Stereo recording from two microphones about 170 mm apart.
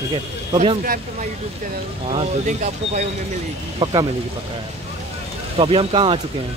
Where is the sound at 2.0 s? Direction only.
40° right (ahead or behind).